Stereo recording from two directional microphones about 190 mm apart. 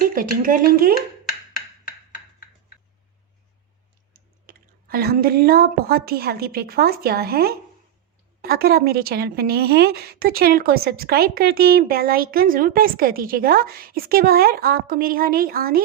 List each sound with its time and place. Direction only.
0.0 s a woman's voice: 50° right (ahead or behind)
4.1 s a woman's voice: 50° right (ahead or behind)